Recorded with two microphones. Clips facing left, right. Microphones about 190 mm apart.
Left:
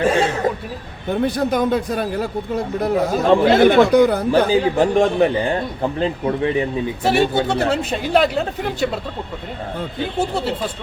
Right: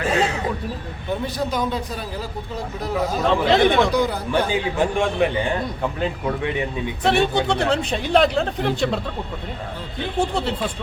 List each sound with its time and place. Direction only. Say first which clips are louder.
0.0 s a sound: left 4 dB; 40° left (ahead or behind)
1.1 s a man's voice: left 6 dB; 55° left (ahead or behind)
4.3 s a man's voice: left 6 dB; 35° left (ahead or behind)
7.0 s speech: left 1 dB; 5° left (ahead or behind)
10.2 s speech: even; 5° left (ahead or behind)